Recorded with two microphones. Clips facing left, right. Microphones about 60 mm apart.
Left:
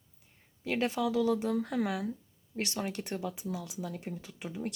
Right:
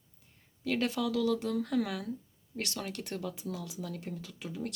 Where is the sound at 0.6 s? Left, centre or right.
Left.